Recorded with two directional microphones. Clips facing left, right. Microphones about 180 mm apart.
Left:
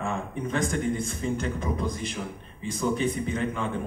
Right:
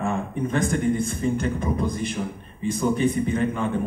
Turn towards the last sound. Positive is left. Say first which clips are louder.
# right 5 dB
turn(degrees=-50)  # may be behind; listen again after turning